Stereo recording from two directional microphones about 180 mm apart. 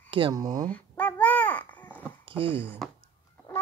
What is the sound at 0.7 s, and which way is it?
Babbling, 10° left (ahead or behind).